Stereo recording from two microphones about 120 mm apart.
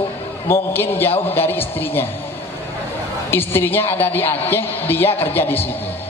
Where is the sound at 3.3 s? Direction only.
20° left (ahead or behind).